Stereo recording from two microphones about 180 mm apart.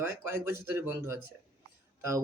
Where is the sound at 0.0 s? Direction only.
15° right (ahead or behind).